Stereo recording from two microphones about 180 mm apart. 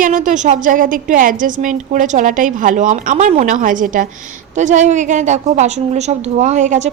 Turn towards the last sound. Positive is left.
turn(degrees=-40)  # may be behind; listen again after turning